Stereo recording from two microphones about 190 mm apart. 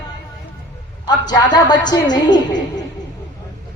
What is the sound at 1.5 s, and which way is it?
Speech, 20° left (ahead or behind).